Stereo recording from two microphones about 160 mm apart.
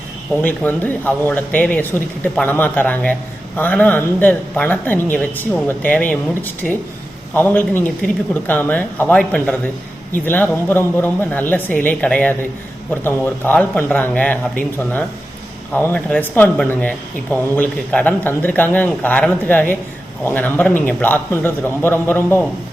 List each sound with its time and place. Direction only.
0.4 s speech: 10° left (ahead or behind)